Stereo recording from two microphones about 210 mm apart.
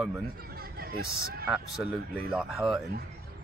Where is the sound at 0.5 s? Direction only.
45° right (ahead or behind).